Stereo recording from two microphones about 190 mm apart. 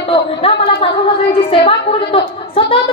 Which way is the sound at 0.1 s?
30° left (ahead or behind).